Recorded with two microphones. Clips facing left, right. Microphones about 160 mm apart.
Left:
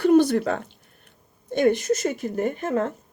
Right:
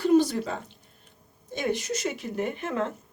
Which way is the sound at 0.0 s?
65° left (ahead or behind).